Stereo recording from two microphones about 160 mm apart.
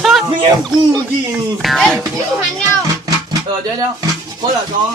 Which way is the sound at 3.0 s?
25° right (ahead or behind).